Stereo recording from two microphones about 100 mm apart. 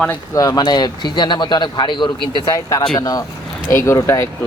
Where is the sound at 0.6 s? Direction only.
45° left (ahead or behind).